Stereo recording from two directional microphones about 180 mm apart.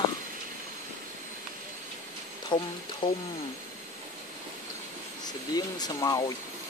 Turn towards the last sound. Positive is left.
turn(degrees=20)  # may be behind; listen again after turning